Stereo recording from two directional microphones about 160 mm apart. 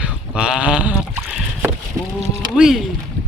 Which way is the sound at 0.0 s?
5° right (ahead or behind).